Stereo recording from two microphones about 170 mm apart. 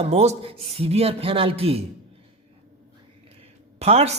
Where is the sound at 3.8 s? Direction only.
40° right (ahead or behind).